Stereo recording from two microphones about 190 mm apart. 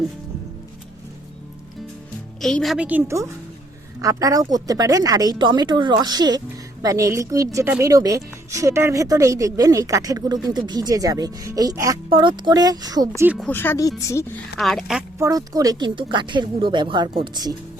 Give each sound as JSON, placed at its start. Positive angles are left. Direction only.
{"t": 2.4, "sound": "a woman's voice", "side_deg": 0}
{"t": 13.2, "sound": "a woman's voice", "side_deg": -5}
{"t": 13.5, "sound": "speech", "side_deg": 10}
{"t": 14.6, "sound": "a woman's voice", "side_deg": 0}
{"t": 15.2, "sound": "speech", "side_deg": -20}